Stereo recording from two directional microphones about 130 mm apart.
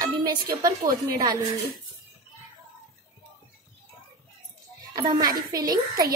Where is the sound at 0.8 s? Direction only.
30° right (ahead or behind).